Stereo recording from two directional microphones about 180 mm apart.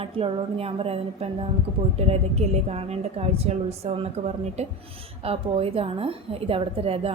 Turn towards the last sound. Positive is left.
turn(degrees=-35)  # may be behind; listen again after turning